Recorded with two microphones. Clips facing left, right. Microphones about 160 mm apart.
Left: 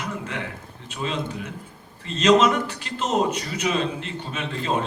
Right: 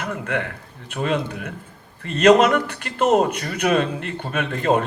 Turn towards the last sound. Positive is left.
turn(degrees=-55)  # may be behind; listen again after turning